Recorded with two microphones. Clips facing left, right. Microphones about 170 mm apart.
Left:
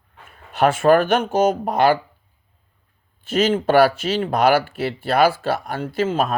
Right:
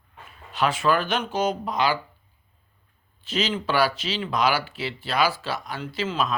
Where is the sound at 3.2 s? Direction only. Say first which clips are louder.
Left 8 dB; 50° left (ahead or behind).